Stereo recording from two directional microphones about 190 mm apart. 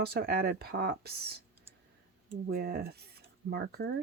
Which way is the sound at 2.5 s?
55° right (ahead or behind).